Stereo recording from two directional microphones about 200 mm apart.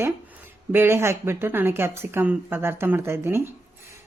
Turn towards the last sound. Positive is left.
turn(degrees=-10)  # may be behind; listen again after turning